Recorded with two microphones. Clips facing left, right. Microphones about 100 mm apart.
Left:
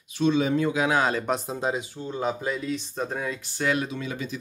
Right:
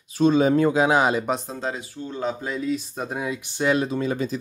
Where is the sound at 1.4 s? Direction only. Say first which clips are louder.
Left 2 dB; 15° left (ahead or behind).